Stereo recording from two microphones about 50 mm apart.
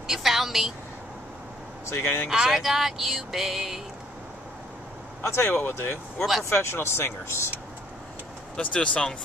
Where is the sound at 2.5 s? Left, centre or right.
Centre.